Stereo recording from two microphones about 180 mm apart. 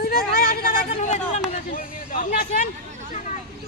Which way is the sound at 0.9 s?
40° left (ahead or behind).